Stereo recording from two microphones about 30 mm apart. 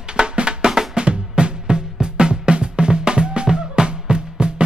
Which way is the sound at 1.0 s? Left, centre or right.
Right.